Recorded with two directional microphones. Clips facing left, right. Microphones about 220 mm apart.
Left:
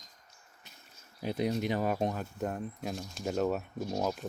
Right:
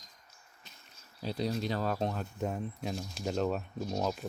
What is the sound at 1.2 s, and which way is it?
Speech, 20° left (ahead or behind).